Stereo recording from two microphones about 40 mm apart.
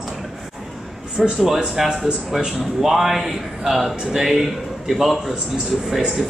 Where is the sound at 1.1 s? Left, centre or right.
Centre.